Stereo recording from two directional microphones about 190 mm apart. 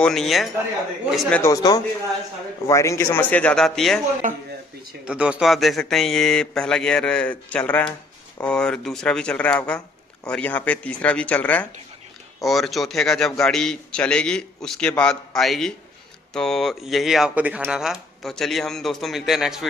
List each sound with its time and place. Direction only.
0.0 s a man's voice: centre (ahead or behind)
1.4 s a man's voice: 20° left (ahead or behind); by 4.0 s centre (ahead or behind)
5.0 s a man's voice: 5° right (ahead or behind)